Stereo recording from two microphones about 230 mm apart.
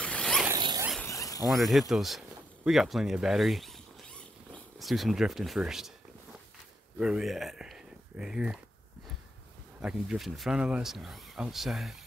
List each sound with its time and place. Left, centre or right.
0.0 s zipper: centre
0.5 s zipper: centre
1.0 s a sound: centre
1.5 s speech: centre
7.0 s speech: centre
9.8 s speech: centre